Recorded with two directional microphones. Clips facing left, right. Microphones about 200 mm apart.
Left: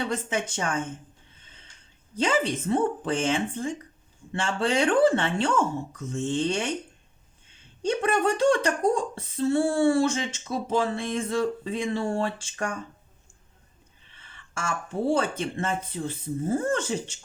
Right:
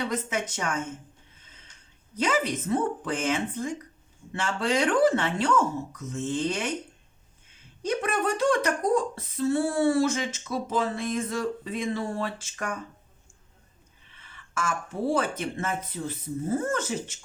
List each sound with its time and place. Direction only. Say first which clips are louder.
0.0 s speech: left 1 dB; 30° left (ahead or behind)
2.1 s speech: left 1 dB; 30° left (ahead or behind)
7.8 s speech: left 3 dB; 30° left (ahead or behind)
14.2 s a sound: right 3 dB; 30° left (ahead or behind)
15.1 s speech: left 1 dB; 30° left (ahead or behind)